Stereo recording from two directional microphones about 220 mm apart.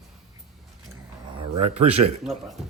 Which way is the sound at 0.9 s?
25° right (ahead or behind).